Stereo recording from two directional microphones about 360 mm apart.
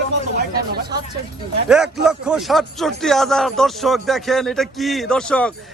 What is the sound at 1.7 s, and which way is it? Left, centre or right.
Speech, centre.